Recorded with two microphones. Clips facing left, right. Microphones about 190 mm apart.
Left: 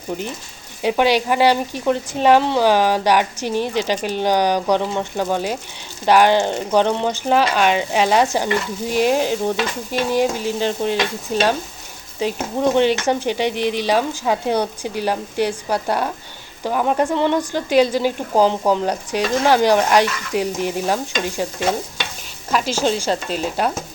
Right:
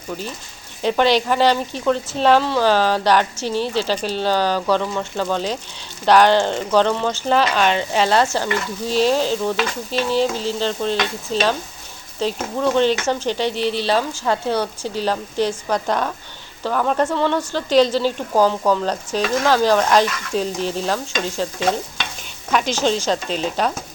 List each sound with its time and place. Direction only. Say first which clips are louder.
0.1 s speech: left 3 dB; 20° left (ahead or behind)
22.5 s speech: even; 5° left (ahead or behind)